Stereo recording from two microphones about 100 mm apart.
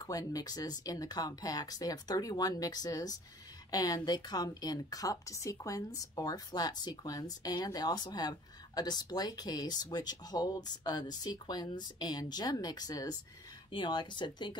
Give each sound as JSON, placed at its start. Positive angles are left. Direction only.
{"t": 0.0, "sound": "a woman's voice", "side_deg": 35}